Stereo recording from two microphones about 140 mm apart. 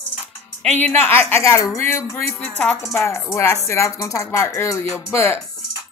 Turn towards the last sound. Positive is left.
turn(degrees=20)  # may be behind; listen again after turning